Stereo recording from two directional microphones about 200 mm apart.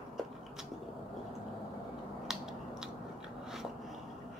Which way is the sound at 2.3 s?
Centre (ahead or behind).